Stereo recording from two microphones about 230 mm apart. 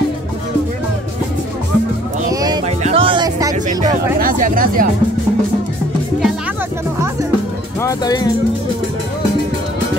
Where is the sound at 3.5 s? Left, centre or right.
Right.